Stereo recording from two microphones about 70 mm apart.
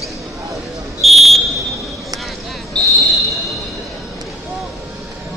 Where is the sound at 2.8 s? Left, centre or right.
Centre.